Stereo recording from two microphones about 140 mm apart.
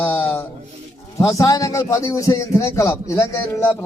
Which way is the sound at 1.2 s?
25° left (ahead or behind).